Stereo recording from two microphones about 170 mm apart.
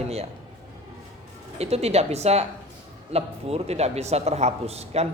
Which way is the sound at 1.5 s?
40° right (ahead or behind).